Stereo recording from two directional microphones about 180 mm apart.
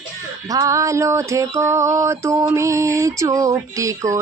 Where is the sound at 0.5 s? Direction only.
20° right (ahead or behind).